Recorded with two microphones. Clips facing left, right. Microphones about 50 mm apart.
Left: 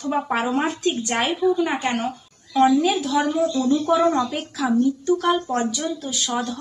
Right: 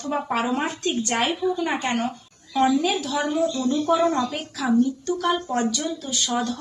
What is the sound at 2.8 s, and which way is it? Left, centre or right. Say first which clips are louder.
Speech: left 4 dB; centre.